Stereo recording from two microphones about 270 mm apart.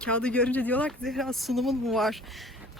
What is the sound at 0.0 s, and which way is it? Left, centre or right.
Speech, centre.